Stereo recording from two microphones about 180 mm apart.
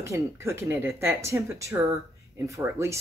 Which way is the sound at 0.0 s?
15° right (ahead or behind).